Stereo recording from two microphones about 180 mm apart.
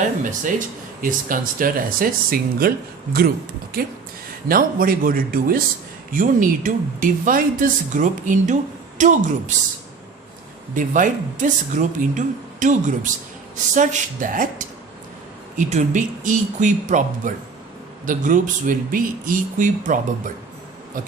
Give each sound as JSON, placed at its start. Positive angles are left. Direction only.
{"t": 1.0, "sound": "a woman's voice", "side_deg": -50}
{"t": 10.8, "sound": "a woman's voice", "side_deg": -45}